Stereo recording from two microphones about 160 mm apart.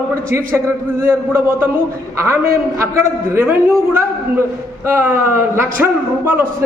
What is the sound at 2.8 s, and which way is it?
A man's voice, 15° right (ahead or behind).